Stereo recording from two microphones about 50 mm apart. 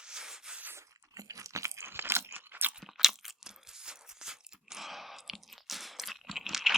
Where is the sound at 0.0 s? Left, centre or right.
Centre.